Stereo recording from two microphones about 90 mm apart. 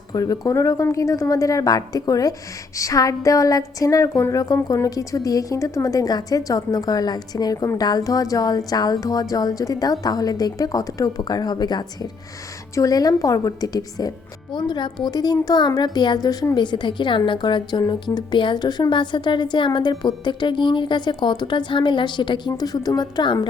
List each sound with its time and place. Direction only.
0.1 s a woman's voice: 40° left (ahead or behind)
14.5 s speech: 55° left (ahead or behind)
16.6 s a woman's voice: 60° left (ahead or behind)